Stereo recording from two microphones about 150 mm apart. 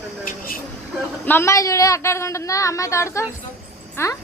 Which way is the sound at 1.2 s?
15° left (ahead or behind).